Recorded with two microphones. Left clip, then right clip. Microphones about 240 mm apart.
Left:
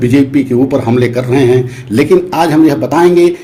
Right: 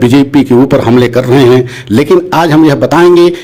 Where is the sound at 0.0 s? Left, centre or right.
Right.